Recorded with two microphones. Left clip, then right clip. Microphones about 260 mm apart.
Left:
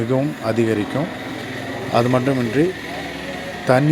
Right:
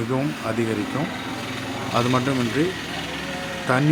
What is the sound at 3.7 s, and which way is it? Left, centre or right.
Speech, centre.